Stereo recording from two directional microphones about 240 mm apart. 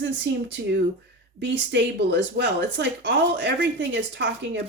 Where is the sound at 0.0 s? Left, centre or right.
Right.